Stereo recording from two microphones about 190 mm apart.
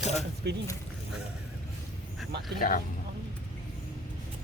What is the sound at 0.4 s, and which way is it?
Speech, 60° right (ahead or behind).